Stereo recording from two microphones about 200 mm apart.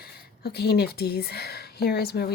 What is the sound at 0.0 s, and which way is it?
A woman's voice, 50° left (ahead or behind).